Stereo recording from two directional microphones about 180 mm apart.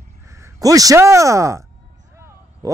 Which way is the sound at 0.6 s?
20° right (ahead or behind).